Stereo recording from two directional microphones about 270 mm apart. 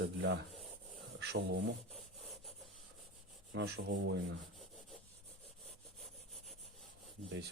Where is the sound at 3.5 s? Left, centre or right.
Right.